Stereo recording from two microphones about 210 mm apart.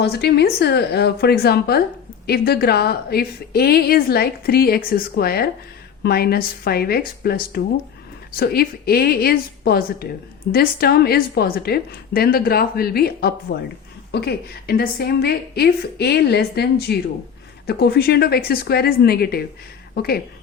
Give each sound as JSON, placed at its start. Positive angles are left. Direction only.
{"t": 0.0, "sound": "a woman's voice", "side_deg": 50}